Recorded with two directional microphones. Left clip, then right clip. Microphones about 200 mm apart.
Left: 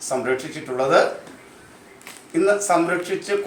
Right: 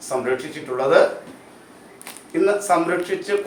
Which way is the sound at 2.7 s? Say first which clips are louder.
Right 1 dB; 10° left (ahead or behind).